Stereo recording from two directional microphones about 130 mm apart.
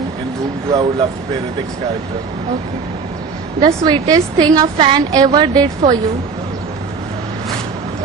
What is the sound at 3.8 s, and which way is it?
A woman's voice, 35° right (ahead or behind).